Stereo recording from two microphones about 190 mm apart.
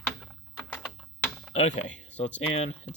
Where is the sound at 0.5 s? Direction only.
5° left (ahead or behind).